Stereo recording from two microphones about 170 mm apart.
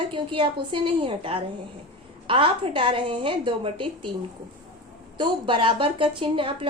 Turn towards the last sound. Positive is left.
turn(degrees=-30)  # may be behind; listen again after turning